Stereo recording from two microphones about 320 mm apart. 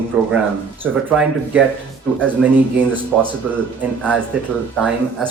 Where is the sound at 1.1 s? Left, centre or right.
Centre.